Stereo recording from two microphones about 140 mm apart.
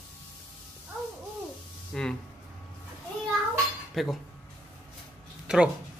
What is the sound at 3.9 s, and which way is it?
Speech, centre (ahead or behind).